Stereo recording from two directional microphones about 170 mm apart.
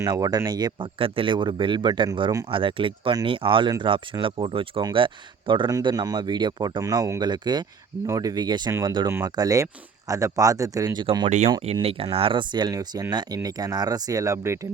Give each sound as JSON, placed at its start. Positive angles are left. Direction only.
{"t": 0.0, "sound": "speech", "side_deg": -25}
{"t": 11.3, "sound": "speech", "side_deg": -45}